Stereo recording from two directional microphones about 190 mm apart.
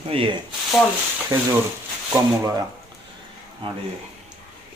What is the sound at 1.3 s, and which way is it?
Speech, 15° right (ahead or behind).